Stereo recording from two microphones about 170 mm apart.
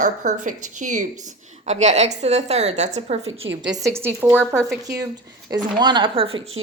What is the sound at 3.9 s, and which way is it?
Speech, 15° right (ahead or behind).